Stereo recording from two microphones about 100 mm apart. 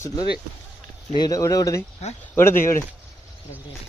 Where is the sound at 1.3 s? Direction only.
35° left (ahead or behind).